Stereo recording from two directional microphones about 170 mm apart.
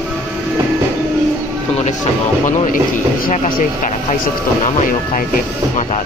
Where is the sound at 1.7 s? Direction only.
40° left (ahead or behind).